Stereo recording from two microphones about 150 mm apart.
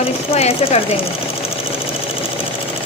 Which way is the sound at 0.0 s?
40° left (ahead or behind).